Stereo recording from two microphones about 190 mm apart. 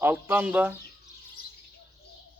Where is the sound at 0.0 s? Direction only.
10° right (ahead or behind).